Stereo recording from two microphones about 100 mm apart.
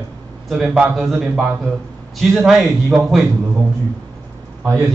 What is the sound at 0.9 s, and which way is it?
A man's voice, 5° right (ahead or behind).